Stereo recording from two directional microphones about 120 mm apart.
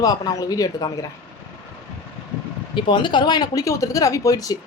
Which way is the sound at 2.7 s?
40° left (ahead or behind).